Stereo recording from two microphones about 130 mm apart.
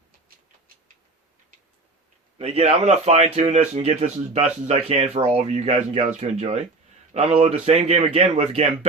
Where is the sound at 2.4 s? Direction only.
55° right (ahead or behind).